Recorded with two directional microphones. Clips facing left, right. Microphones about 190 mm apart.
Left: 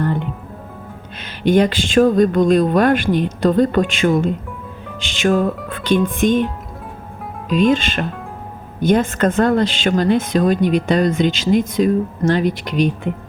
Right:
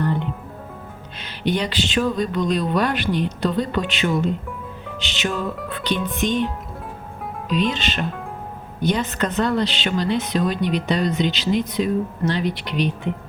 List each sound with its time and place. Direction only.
1.2 s speech: 50° left (ahead or behind)
7.5 s speech: 50° left (ahead or behind)